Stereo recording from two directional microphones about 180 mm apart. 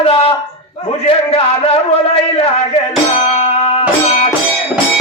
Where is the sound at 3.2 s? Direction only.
35° left (ahead or behind).